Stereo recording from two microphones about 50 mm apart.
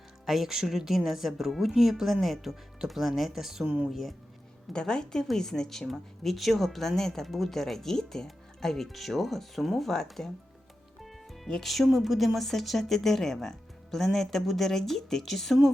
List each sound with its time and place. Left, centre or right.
0.3 s a woman's voice: centre
4.7 s a woman's voice: centre
11.4 s a woman's voice: centre